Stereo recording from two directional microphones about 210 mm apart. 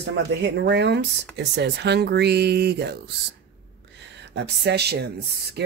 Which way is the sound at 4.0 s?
55° right (ahead or behind).